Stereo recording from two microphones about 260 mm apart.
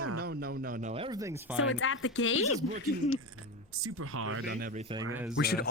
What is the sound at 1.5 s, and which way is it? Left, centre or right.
Speech, left.